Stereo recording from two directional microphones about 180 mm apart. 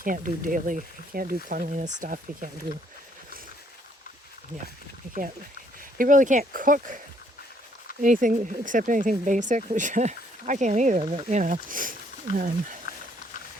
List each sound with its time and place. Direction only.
0.0 s speech: 50° right (ahead or behind)
6.0 s speech: 45° right (ahead or behind)
8.0 s speech: 45° right (ahead or behind)
12.9 s a sound: 55° left (ahead or behind)